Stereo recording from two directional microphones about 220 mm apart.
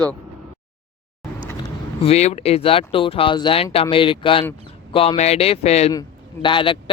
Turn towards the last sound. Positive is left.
turn(degrees=20)  # may be behind; listen again after turning